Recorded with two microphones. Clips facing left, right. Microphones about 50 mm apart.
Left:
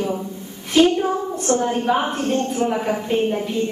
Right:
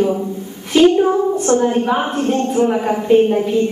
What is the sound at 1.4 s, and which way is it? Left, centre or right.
Speech, right.